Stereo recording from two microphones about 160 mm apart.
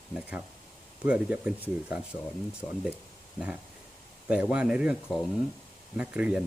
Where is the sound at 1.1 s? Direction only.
5° right (ahead or behind).